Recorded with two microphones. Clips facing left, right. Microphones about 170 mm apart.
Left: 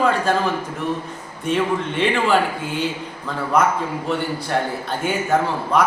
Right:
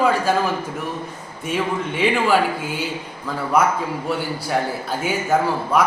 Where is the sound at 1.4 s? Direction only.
5° right (ahead or behind).